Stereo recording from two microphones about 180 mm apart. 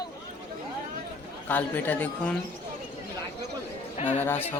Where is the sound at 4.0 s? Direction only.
35° left (ahead or behind).